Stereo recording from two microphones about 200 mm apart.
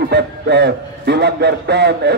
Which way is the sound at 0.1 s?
55° right (ahead or behind).